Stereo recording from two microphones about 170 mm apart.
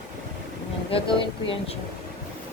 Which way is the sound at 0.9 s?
30° left (ahead or behind).